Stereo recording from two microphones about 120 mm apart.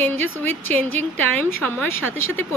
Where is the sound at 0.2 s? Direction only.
15° left (ahead or behind).